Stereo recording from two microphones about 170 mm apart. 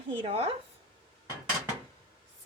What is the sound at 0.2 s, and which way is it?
Speech, 35° right (ahead or behind).